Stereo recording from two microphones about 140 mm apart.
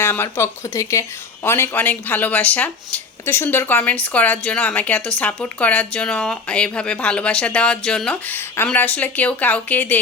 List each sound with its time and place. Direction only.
0.0 s speech: 15° left (ahead or behind)